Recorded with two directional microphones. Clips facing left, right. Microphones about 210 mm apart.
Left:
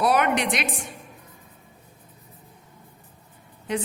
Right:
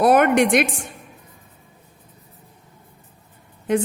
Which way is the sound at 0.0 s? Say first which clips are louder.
Right 7 dB; 50° right (ahead or behind).